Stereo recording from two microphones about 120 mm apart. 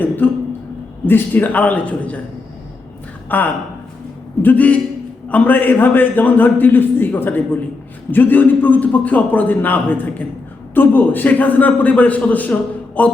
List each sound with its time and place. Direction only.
0.2 s a man's voice: 15° left (ahead or behind)
3.2 s a woman's voice: 15° left (ahead or behind)